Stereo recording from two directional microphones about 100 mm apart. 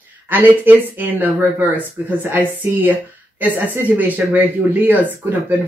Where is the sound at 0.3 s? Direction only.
20° right (ahead or behind).